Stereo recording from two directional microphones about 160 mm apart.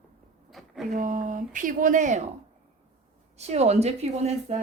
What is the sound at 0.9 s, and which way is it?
Speech, 55° right (ahead or behind).